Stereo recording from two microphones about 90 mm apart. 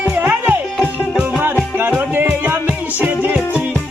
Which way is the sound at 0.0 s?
15° right (ahead or behind).